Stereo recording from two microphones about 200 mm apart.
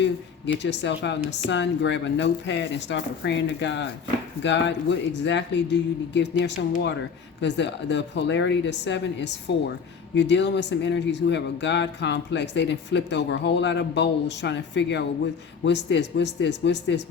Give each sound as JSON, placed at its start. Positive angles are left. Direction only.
{"t": 0.0, "sound": "speech", "side_deg": 60}